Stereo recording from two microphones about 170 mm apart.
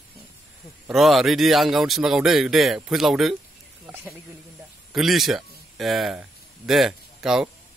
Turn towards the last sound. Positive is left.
turn(degrees=-5)  # may be behind; listen again after turning